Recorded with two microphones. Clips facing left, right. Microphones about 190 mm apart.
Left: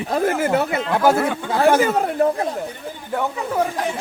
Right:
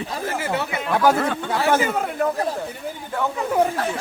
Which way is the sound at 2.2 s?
30° left (ahead or behind).